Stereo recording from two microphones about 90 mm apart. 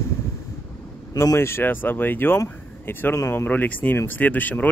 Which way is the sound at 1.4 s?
30° left (ahead or behind).